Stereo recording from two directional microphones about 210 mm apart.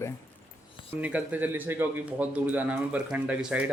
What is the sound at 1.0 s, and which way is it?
Speech, 5° right (ahead or behind).